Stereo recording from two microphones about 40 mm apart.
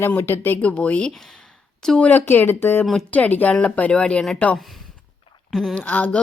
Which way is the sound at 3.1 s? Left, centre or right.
Left.